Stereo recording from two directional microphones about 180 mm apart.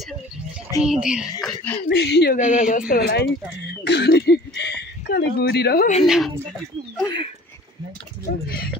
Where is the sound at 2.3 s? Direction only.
45° left (ahead or behind).